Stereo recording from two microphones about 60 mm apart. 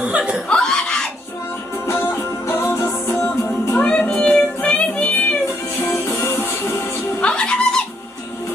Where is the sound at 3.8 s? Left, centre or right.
Left.